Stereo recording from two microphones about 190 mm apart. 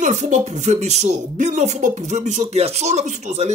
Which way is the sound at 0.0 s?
40° right (ahead or behind).